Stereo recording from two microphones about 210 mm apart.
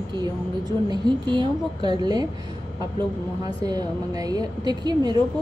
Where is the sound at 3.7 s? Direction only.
20° right (ahead or behind).